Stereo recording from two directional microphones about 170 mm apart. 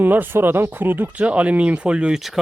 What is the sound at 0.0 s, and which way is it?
Speech, 10° right (ahead or behind).